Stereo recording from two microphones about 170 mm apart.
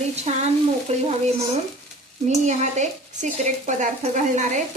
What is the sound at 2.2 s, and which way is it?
Stir, 45° right (ahead or behind).